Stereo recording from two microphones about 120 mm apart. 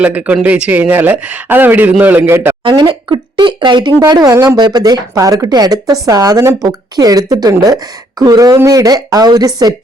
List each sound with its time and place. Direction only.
0.0 s speech: 10° right (ahead or behind)
2.6 s speech: 40° right (ahead or behind)